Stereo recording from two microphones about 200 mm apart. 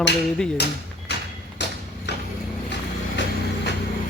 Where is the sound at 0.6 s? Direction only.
55° left (ahead or behind).